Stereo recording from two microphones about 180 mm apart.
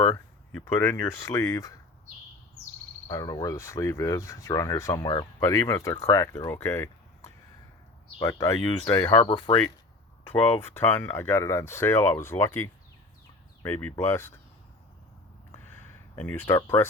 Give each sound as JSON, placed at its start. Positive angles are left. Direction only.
{"t": 0.6, "sound": "speech", "side_deg": 15}
{"t": 3.1, "sound": "speech", "side_deg": 20}
{"t": 10.3, "sound": "speech", "side_deg": 10}
{"t": 16.1, "sound": "speech", "side_deg": 10}